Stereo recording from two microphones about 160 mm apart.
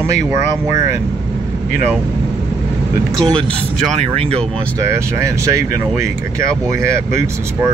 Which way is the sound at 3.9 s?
40° right (ahead or behind).